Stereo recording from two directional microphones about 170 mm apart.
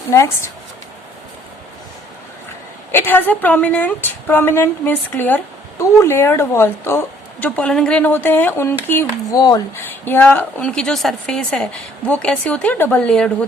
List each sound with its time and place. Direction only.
0.1 s speech: 15° left (ahead or behind)
2.9 s speech: 10° left (ahead or behind)